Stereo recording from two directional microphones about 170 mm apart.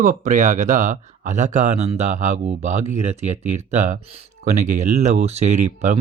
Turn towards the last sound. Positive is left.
turn(degrees=-45)  # may be behind; listen again after turning